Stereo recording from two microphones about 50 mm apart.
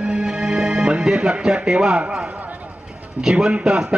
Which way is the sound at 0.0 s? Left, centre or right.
Centre.